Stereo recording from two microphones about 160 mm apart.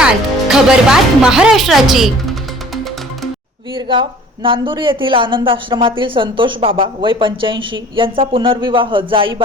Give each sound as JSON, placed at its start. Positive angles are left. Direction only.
{"t": 0.0, "sound": "speech", "side_deg": -5}
{"t": 3.8, "sound": "a woman's voice", "side_deg": -30}